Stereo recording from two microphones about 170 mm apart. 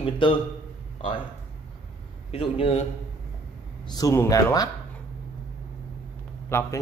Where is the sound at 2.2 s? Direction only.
35° left (ahead or behind).